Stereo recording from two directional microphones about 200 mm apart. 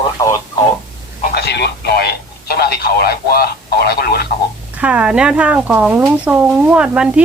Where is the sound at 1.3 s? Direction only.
55° left (ahead or behind).